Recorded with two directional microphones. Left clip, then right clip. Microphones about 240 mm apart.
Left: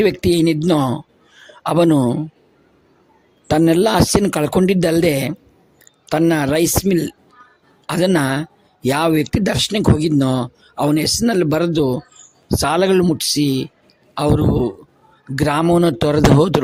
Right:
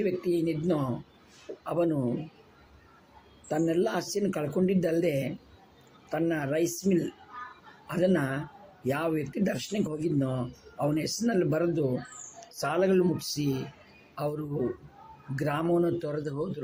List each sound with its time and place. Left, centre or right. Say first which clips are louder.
0.0 s speech: left 13 dB; left
3.5 s speech: left 13 dB; left
15.4 s speech: left 12 dB; left